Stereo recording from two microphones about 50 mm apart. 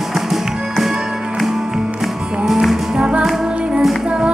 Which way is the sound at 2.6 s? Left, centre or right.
Centre.